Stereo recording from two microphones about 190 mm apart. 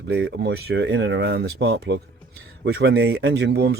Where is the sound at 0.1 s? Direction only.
60° right (ahead or behind).